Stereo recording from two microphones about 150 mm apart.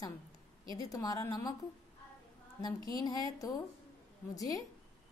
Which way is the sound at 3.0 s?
25° left (ahead or behind).